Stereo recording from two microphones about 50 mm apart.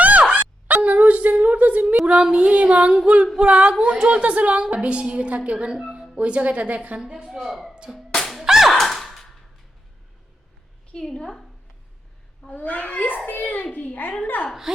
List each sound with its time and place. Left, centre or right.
0.0 s a sound: right
2.0 s a woman's voice: centre
7.0 s a woman's voice: centre
7.3 s speech: centre
7.9 s whip: centre
8.4 s a sound: centre
8.7 s a sound: centre
10.9 s a woman's voice: centre
12.5 s a child's voice: left